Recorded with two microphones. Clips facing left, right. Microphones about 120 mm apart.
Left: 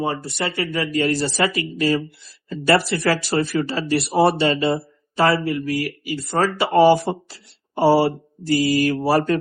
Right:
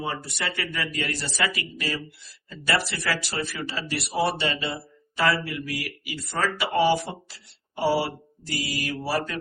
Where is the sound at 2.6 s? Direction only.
45° left (ahead or behind).